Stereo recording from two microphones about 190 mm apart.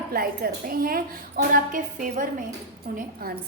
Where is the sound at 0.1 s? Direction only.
50° right (ahead or behind).